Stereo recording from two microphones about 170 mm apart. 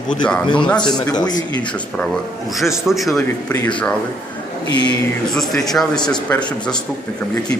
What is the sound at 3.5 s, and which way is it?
Speech, 20° left (ahead or behind).